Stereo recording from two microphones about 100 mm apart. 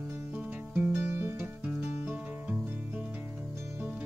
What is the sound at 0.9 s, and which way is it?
Music, 25° right (ahead or behind).